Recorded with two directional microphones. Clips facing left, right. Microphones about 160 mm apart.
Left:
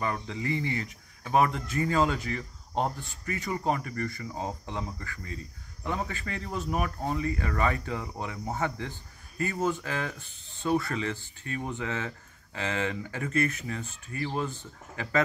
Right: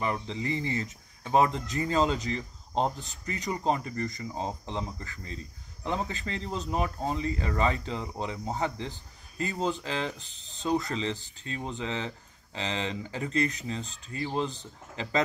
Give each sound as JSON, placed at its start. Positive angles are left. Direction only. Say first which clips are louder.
{"t": 0.0, "sound": "speech", "louder": "right 1 dB", "side_deg": -25}